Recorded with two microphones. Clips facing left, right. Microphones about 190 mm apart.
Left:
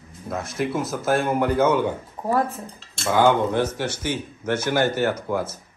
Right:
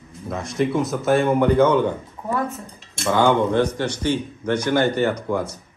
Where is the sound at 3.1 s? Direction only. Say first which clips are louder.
Right 1 dB; 5° left (ahead or behind).